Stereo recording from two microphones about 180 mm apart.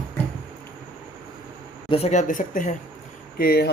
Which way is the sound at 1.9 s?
35° left (ahead or behind).